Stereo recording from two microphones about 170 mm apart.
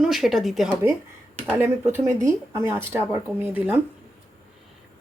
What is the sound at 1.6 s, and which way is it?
Speech, 10° right (ahead or behind).